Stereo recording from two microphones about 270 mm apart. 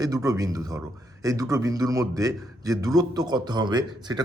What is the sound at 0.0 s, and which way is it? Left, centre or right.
A man's voice, centre.